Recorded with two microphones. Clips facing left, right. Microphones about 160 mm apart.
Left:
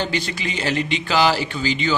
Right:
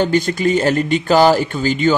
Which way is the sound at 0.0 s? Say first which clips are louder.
Right 9 dB; 45° right (ahead or behind).